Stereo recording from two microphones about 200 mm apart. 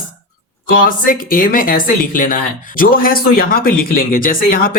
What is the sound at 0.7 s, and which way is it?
A woman's voice, 45° left (ahead or behind).